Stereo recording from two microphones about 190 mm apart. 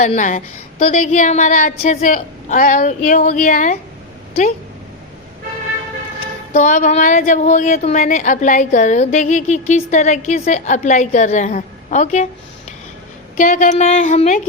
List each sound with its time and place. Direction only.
0.0 s a woman's voice: 40° left (ahead or behind)
6.5 s a woman's voice: 40° left (ahead or behind)
13.3 s speech: 45° left (ahead or behind)